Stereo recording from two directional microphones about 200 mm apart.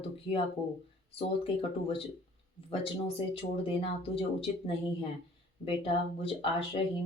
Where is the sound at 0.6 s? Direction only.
5° left (ahead or behind).